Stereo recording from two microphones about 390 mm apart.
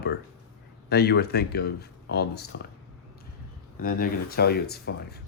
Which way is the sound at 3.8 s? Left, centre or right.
Left.